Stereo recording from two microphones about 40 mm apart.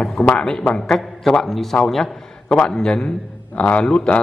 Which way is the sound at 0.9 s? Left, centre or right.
Centre.